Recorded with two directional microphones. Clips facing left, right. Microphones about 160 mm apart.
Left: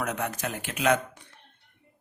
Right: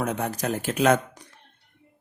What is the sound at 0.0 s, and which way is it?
A man's voice, 30° right (ahead or behind).